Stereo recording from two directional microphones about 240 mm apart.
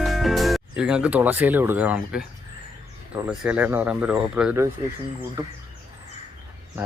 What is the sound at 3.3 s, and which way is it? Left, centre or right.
Speech, centre.